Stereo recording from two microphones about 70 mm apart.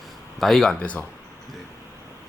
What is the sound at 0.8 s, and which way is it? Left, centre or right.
Speech, centre.